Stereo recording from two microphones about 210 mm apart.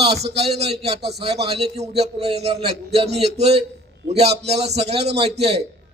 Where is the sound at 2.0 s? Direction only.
30° right (ahead or behind).